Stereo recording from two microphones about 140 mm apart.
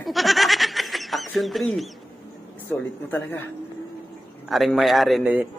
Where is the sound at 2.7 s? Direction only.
10° left (ahead or behind).